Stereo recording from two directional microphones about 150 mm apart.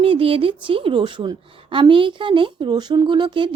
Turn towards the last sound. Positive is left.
turn(degrees=-30)  # may be behind; listen again after turning